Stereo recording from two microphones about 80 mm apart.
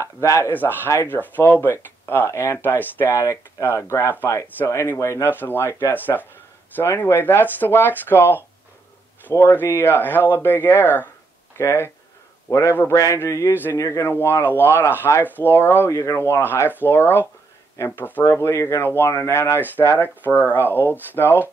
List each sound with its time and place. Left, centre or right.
0.0 s speech: left
0.5 s speech: left
5.2 s speech: left
5.7 s speech: left
5.9 s a man's voice: left
14.0 s speech: left
18.2 s speech: left
20.2 s speech: left